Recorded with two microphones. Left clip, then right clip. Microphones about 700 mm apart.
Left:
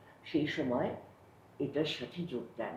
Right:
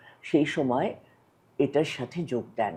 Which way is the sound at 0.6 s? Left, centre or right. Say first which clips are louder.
Right 8 dB; right.